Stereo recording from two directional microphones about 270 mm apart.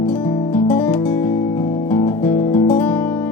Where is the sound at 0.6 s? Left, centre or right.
Centre.